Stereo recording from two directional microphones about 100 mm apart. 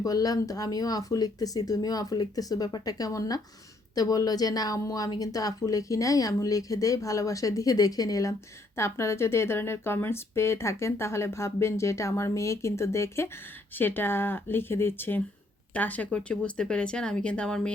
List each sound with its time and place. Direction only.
0.0 s a woman's voice: 40° left (ahead or behind); by 17.7 s 10° left (ahead or behind)